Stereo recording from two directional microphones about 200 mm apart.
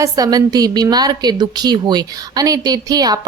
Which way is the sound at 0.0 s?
20° right (ahead or behind).